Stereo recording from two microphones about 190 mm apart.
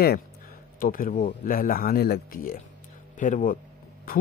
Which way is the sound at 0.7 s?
45° left (ahead or behind).